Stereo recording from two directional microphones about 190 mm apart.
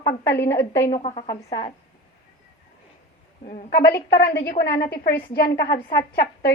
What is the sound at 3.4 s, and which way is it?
Speech, 40° left (ahead or behind).